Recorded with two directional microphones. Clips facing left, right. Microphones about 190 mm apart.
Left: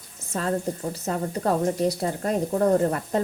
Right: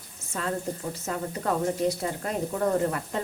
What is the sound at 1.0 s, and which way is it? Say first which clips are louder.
Speech: left 4 dB; 35° left (ahead or behind).